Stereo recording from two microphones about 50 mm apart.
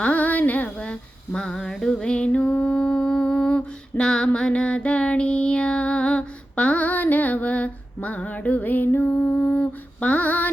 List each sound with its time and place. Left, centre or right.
0.0 s a sound: left
0.8 s female singing: centre
4.4 s music: centre